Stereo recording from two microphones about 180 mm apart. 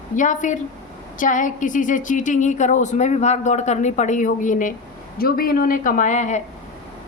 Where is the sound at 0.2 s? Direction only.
45° left (ahead or behind).